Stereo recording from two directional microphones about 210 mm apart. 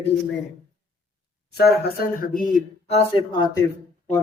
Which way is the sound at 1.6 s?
45° left (ahead or behind).